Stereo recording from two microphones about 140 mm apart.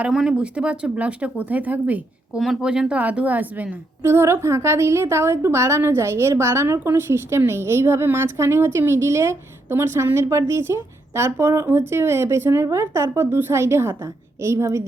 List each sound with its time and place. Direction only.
0.0 s a woman's voice: 5° right (ahead or behind); by 14.8 s 20° right (ahead or behind)